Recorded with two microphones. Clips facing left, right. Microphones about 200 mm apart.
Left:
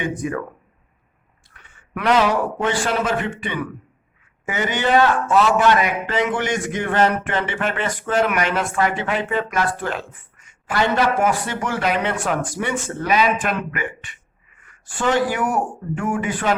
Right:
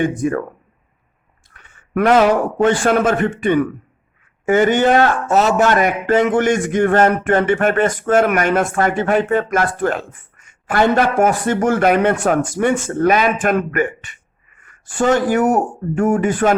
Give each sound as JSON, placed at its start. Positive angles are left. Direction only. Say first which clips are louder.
{"t": 0.2, "sound": "a man's voice", "louder": "right 6 dB", "side_deg": -45}
{"t": 1.5, "sound": "a man's voice", "louder": "right 1 dB", "side_deg": -45}